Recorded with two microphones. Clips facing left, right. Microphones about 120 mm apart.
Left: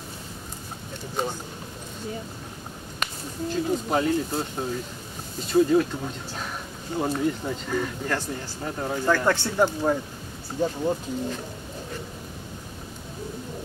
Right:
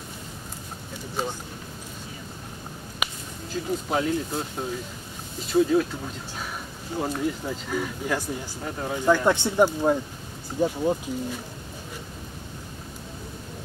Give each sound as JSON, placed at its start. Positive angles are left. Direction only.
{"t": 3.0, "sound": "speech", "side_deg": 0}
{"t": 7.0, "sound": "speech", "side_deg": 0}
{"t": 8.6, "sound": "speech", "side_deg": 0}
{"t": 8.9, "sound": "speech", "side_deg": -15}